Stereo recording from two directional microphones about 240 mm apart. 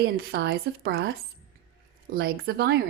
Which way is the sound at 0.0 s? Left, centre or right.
Right.